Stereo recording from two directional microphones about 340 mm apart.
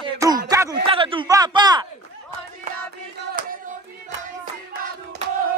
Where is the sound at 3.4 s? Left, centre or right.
Right.